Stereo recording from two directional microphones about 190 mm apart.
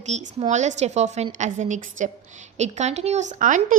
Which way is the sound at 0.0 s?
35° right (ahead or behind).